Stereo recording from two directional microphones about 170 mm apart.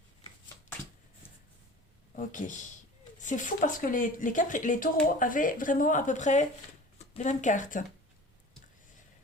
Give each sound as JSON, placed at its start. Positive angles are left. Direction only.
{"t": 2.1, "sound": "speech", "side_deg": 50}